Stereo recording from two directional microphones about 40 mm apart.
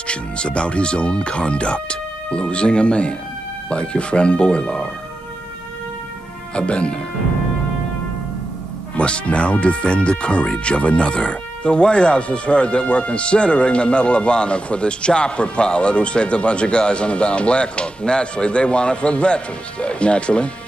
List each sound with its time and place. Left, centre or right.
0.0 s speech: left
6.5 s speech: left
8.9 s speech: left